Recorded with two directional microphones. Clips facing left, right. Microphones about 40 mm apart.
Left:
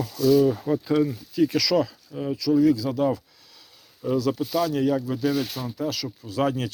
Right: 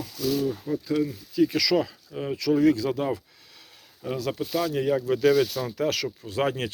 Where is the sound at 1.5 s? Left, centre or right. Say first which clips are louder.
Left 1 dB; centre.